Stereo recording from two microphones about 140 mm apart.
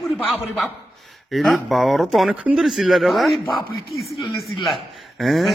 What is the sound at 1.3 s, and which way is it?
A man's voice, centre (ahead or behind).